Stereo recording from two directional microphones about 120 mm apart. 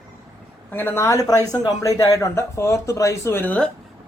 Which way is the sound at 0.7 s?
20° left (ahead or behind).